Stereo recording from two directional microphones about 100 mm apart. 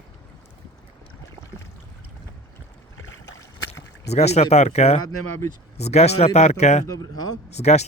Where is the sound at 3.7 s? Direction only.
90° left.